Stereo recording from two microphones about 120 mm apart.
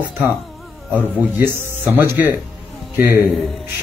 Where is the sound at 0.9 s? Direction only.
15° right (ahead or behind).